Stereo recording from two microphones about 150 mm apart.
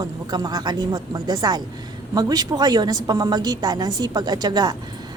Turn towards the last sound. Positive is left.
turn(degrees=-25)  # may be behind; listen again after turning